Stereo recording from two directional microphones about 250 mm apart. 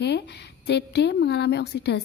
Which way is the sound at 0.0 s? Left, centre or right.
Left.